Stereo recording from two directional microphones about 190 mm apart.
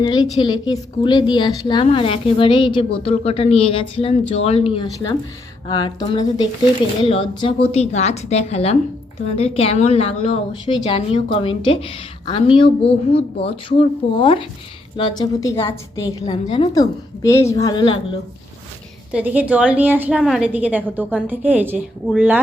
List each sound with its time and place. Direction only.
0.0 s a woman's voice: 25° left (ahead or behind)
19.1 s a woman's voice: 10° right (ahead or behind)